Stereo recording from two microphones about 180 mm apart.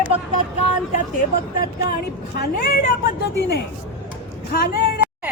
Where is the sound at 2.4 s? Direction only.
60° left (ahead or behind).